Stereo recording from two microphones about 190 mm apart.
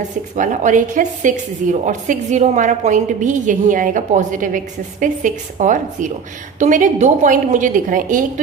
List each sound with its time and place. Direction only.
0.3 s a woman's voice: 40° right (ahead or behind)